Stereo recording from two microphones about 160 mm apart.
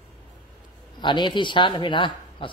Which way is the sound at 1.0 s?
30° left (ahead or behind).